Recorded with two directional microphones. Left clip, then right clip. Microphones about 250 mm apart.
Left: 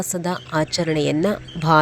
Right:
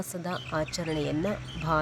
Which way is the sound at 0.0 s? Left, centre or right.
Left.